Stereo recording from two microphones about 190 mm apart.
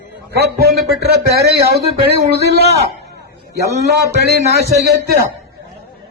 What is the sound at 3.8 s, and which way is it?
Speech, 60° right (ahead or behind).